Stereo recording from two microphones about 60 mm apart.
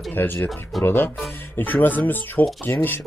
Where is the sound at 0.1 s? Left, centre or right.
Left.